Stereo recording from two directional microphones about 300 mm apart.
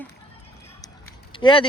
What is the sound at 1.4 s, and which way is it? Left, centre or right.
Speech, centre.